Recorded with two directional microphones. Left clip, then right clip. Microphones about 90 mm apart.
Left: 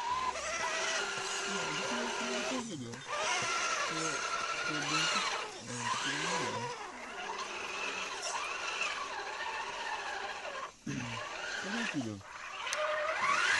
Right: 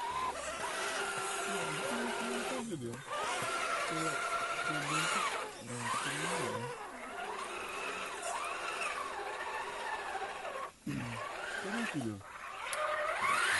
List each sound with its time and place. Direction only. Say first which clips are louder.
4.8 s sewing machine: left 3 dB; 20° left (ahead or behind)
5.9 s a sound: left 2 dB; 20° left (ahead or behind)
8.6 s vehicle: left 2 dB; 20° left (ahead or behind)
12.7 s vehicle: left 1 dB; 20° left (ahead or behind)